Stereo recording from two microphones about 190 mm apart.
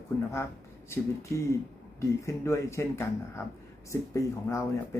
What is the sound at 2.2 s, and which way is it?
Speech, 15° left (ahead or behind).